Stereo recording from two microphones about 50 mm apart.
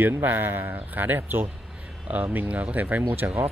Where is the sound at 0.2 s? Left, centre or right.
Right.